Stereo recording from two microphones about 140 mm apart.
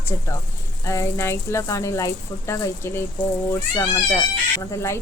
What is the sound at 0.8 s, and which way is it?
Speech, 20° left (ahead or behind).